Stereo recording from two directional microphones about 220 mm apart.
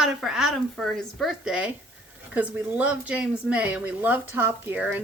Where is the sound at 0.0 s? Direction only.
Centre (ahead or behind).